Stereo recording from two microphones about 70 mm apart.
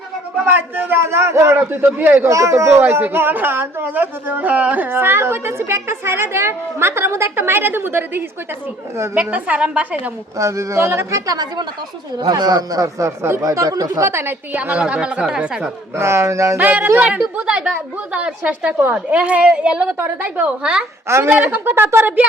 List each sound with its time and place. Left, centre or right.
0.4 s speech: right
2.3 s speech: right
9.3 s a woman's voice: centre
10.3 s speech: right
11.3 s a man's voice: right
14.0 s speech: right
14.5 s a woman's voice: right
16.0 s speech: right
16.6 s a woman's voice: right
17.0 s a woman's voice: centre
21.2 s a woman's voice: right